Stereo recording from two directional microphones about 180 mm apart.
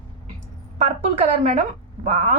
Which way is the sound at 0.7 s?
35° right (ahead or behind).